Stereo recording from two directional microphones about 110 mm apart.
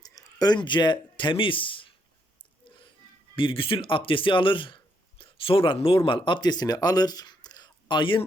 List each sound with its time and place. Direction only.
0.0 s speech: 35° left (ahead or behind); by 1.9 s 50° left (ahead or behind)
3.3 s speech: 50° left (ahead or behind)